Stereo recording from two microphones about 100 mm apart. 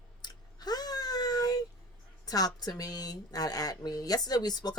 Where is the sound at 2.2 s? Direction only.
40° left (ahead or behind).